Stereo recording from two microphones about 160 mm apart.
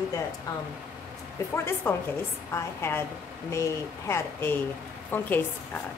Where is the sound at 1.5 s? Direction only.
15° left (ahead or behind).